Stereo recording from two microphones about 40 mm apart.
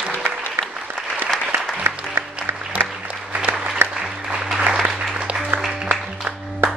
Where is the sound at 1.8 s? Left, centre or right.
Right.